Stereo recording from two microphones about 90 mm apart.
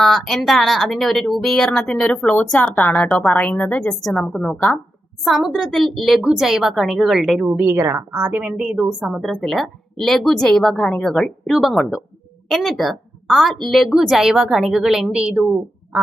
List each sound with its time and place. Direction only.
0.0 s speech: 5° left (ahead or behind)
5.2 s a woman's voice: centre (ahead or behind)
7.5 s a woman's voice: 25° right (ahead or behind)
9.5 s a woman's voice: centre (ahead or behind)